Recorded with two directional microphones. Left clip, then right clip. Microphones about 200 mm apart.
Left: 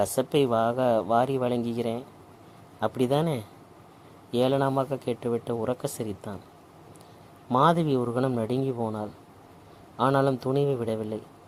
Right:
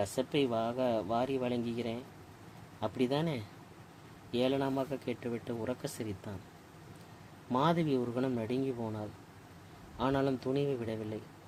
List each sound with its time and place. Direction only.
0.0 s speech: 40° left (ahead or behind)
7.5 s speech: 35° left (ahead or behind)